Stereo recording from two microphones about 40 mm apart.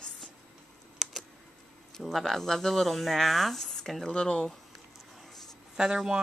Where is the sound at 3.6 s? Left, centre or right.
Centre.